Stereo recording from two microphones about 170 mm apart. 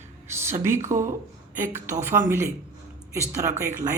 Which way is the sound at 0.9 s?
15° right (ahead or behind).